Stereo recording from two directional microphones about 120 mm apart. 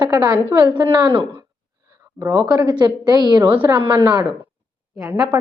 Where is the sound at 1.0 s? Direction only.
40° right (ahead or behind).